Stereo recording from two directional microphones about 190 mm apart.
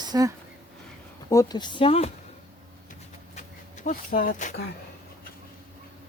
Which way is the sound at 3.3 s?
40° left (ahead or behind).